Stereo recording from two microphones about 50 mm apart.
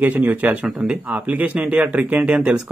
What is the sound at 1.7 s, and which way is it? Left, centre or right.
Speech, right.